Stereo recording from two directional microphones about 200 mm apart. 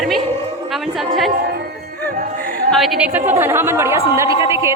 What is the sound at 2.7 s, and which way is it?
A woman's voice, centre (ahead or behind).